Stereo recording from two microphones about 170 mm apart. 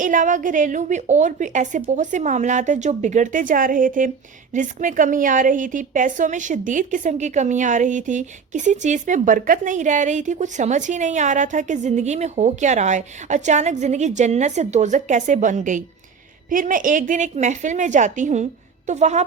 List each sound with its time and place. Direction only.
0.0 s a woman's voice: 50° right (ahead or behind)